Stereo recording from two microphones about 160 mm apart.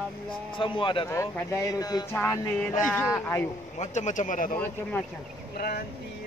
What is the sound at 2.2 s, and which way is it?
Music, 10° left (ahead or behind).